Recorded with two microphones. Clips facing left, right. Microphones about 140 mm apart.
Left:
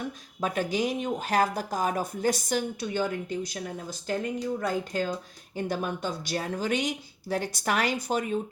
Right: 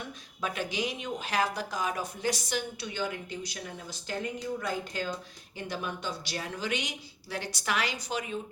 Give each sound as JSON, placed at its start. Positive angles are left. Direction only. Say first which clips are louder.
{"t": 0.4, "sound": "speech", "louder": "left 5 dB", "side_deg": 45}